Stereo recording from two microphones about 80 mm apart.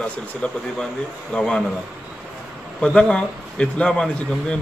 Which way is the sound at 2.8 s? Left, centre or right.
Centre.